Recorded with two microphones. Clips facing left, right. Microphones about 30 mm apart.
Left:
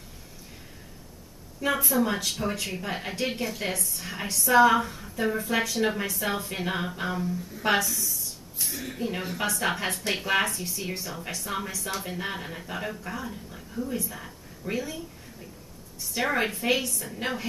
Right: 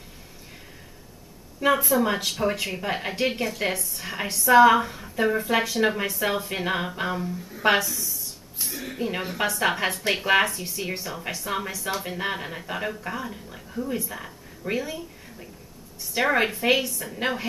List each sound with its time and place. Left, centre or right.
1.7 s a woman's voice: centre
2.0 s speech: centre
7.8 s a sound: centre
8.9 s a woman's voice: centre
17.2 s a woman's voice: centre